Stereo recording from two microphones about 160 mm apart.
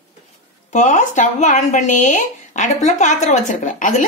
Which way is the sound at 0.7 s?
50° left (ahead or behind).